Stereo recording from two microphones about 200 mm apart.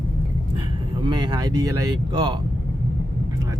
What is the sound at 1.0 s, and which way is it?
Speech, 20° right (ahead or behind).